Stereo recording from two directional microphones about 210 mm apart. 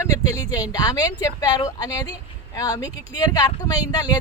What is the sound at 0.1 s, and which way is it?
Speech, 15° left (ahead or behind).